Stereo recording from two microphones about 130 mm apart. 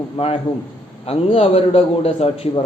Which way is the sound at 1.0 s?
50° left (ahead or behind).